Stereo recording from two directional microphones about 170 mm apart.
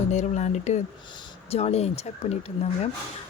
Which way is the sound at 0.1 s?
45° left (ahead or behind).